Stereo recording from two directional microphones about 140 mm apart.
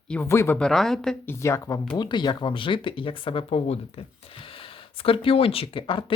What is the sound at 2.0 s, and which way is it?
Speech, 30° left (ahead or behind).